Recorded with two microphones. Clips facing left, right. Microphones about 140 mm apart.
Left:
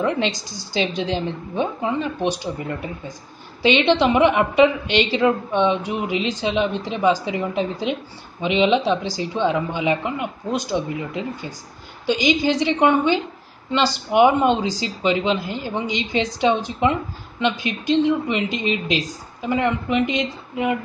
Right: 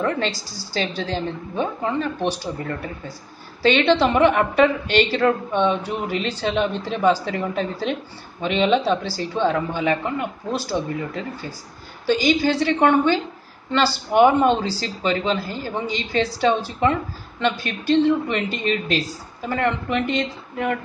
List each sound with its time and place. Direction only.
0.6 s a woman's voice: 15° left (ahead or behind)